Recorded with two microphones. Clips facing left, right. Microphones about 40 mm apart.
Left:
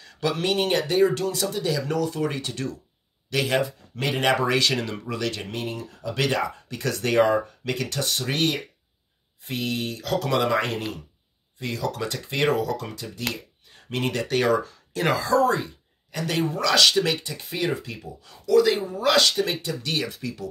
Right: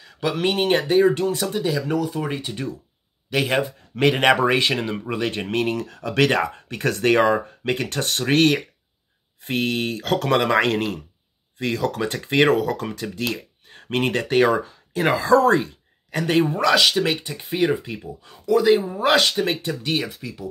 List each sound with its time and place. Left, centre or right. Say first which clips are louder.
0.0 s speech: right 3 dB; centre; by 1.6 s right
1.9 s speech: right 2 dB; centre
5.5 s speech: right 8 dB; right
13.3 s a sound: right 5 dB; right
14.3 s speech: right 4 dB; right
15.2 s speech: right 7 dB; right
16.3 s speech: right 5 dB; right
16.7 s speech: left 2 dB; centre
18.9 s speech: right 2 dB; right
20.1 s speech: left 1 dB; centre